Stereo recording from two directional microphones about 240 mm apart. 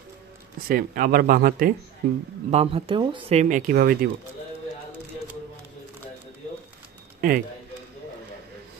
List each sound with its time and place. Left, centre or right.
0.7 s speech: right
2.5 s speech: right
7.2 s speech: right